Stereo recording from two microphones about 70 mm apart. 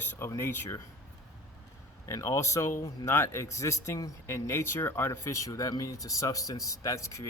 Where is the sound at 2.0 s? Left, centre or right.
Left.